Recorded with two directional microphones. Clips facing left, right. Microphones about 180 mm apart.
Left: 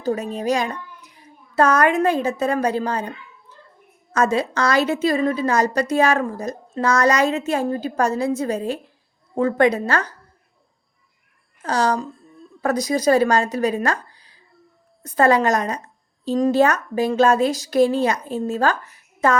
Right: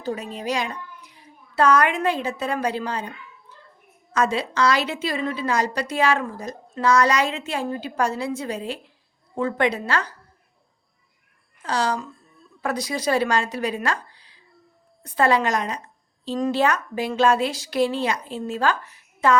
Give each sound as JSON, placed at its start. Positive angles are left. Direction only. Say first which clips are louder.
{"t": 0.0, "sound": "a woman's voice", "louder": "left 6 dB", "side_deg": 45}
{"t": 4.1, "sound": "a woman's voice", "louder": "left 3 dB", "side_deg": 45}
{"t": 11.6, "sound": "a woman's voice", "louder": "left 4 dB", "side_deg": 45}